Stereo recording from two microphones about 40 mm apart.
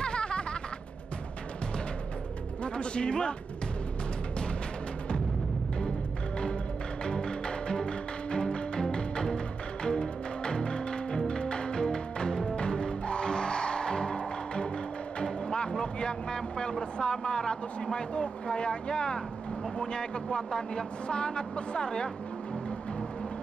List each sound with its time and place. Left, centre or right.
0.0 s music: left
2.6 s speech: left
7.1 s music: left
15.7 s speech: left